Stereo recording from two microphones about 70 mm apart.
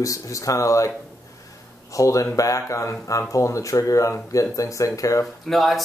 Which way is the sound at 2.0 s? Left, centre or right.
Left.